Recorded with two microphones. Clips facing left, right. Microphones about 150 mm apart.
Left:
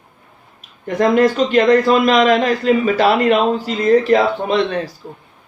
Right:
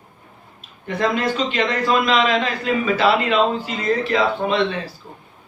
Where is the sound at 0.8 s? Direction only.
40° left (ahead or behind).